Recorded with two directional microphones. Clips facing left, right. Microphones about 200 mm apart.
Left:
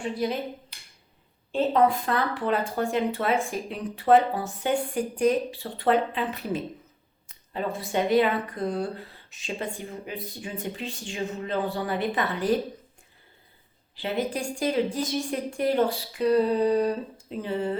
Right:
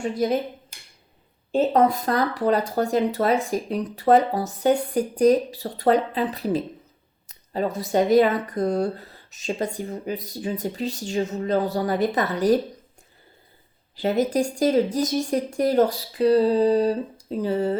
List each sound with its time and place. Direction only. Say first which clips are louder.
0.0 s speech: right 5 dB; 45° right (ahead or behind)
0.7 s a sound: right 3 dB; 45° right (ahead or behind)
1.5 s speech: right 3 dB; 40° right (ahead or behind)
13.9 s speech: right 7 dB; 40° right (ahead or behind)